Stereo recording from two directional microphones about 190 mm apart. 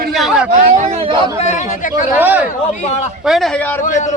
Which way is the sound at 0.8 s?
35° right (ahead or behind).